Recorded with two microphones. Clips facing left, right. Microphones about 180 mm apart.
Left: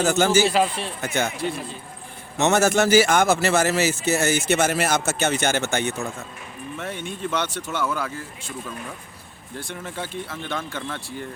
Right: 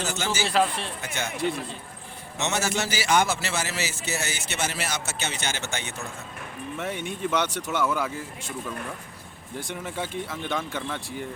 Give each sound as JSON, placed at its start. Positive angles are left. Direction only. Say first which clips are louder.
{"t": 0.0, "sound": "speech", "louder": "left 10 dB", "side_deg": 50}
{"t": 0.4, "sound": "speech", "louder": "left 3 dB", "side_deg": 5}
{"t": 1.0, "sound": "speech", "louder": "left 10 dB", "side_deg": 50}
{"t": 2.4, "sound": "speech", "louder": "left 9 dB", "side_deg": 50}
{"t": 6.7, "sound": "speech", "louder": "even", "side_deg": -15}
{"t": 9.6, "sound": "speech", "louder": "even", "side_deg": -15}